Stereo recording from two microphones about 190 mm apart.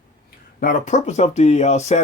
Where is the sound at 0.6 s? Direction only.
45° left (ahead or behind).